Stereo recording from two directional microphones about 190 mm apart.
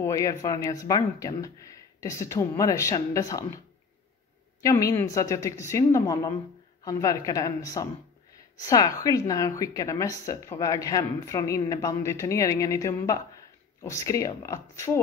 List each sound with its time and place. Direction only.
0.0 s a woman's voice: 15° left (ahead or behind)